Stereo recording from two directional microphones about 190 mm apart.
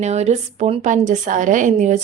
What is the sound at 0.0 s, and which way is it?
A woman's voice, 35° right (ahead or behind).